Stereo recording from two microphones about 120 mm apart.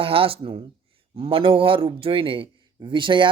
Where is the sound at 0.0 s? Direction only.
50° right (ahead or behind).